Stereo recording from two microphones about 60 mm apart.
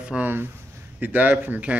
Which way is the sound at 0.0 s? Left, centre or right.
Centre.